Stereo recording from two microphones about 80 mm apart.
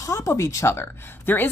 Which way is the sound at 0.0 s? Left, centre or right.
Left.